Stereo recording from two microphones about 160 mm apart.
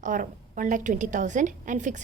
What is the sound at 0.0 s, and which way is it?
A woman's voice, 55° right (ahead or behind).